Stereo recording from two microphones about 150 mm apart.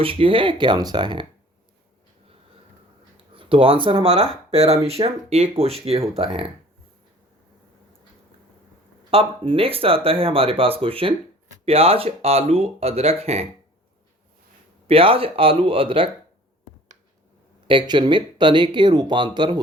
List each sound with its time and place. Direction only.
0.0 s speech: 35° right (ahead or behind)
3.3 s speech: 35° right (ahead or behind)
9.0 s speech: 35° right (ahead or behind)
14.8 s speech: 40° right (ahead or behind)
17.7 s speech: 30° right (ahead or behind)